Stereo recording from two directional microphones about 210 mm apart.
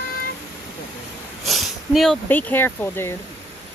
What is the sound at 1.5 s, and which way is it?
Speech, centre (ahead or behind).